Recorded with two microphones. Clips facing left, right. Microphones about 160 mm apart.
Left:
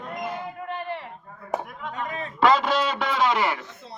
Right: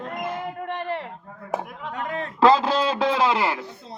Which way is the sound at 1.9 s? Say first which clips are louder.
Right 3 dB; 60° right (ahead or behind).